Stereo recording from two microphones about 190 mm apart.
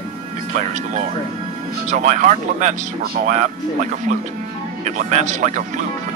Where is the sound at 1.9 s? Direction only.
40° right (ahead or behind).